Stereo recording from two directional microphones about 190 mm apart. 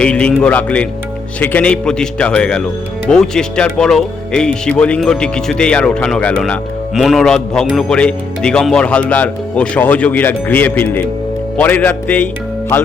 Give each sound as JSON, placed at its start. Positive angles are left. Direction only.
{"t": 0.0, "sound": "speech", "side_deg": 5}